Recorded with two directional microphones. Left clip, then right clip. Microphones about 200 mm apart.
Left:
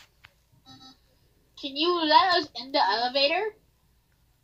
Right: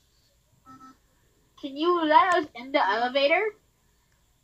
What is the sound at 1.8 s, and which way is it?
A woman's voice, 25° left (ahead or behind).